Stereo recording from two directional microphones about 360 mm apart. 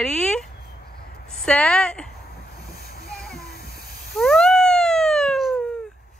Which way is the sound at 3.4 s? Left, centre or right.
Left.